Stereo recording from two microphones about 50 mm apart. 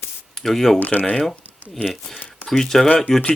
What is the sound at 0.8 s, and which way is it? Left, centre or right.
Speech, left.